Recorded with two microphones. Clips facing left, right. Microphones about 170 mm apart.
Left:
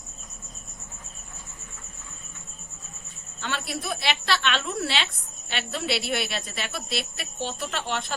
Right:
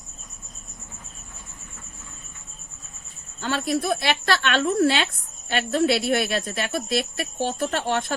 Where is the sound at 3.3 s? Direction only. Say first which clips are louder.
Right 8 dB; 40° right (ahead or behind).